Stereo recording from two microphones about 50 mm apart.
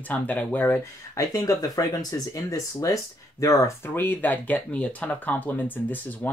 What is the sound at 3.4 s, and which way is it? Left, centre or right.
Speech, left.